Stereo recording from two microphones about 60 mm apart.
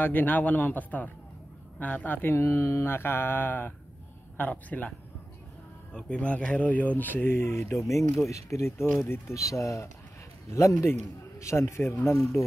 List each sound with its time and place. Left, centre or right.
0.0 s speech: left
1.8 s mantra: left
4.4 s speech: left
5.9 s speech: centre; by 7.6 s left
7.7 s a man's voice: left